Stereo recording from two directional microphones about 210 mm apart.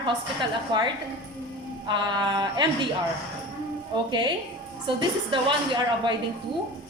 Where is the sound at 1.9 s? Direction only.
20° right (ahead or behind).